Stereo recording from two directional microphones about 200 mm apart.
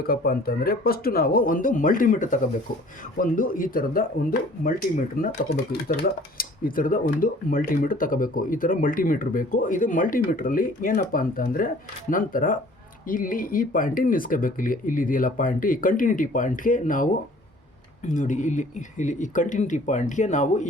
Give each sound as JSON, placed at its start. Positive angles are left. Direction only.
{"t": 0.0, "sound": "speech", "side_deg": 50}